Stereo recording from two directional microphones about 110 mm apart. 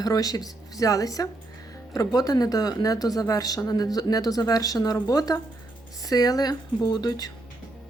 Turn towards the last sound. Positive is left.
turn(degrees=40)  # may be behind; listen again after turning